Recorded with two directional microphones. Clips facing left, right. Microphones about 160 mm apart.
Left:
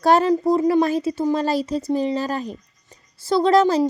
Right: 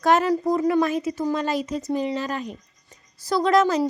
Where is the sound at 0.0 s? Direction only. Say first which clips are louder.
Left 3 dB; 30° left (ahead or behind).